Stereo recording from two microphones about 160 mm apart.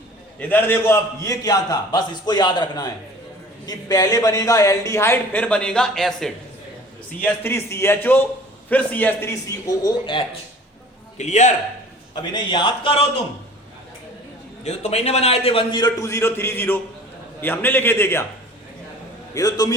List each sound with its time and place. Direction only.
0.3 s a man's voice: 10° left (ahead or behind)
7.2 s a man's voice: 15° left (ahead or behind)
11.2 s a man's voice: 50° left (ahead or behind)
12.1 s a man's voice: 30° left (ahead or behind)
14.6 s a man's voice: 45° left (ahead or behind); by 18.3 s 15° left (ahead or behind)
19.3 s a man's voice: 25° left (ahead or behind)